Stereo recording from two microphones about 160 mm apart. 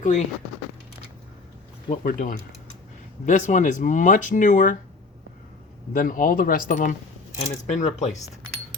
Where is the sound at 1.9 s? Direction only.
60° left (ahead or behind).